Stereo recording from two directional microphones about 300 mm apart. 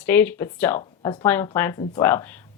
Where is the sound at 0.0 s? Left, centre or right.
Centre.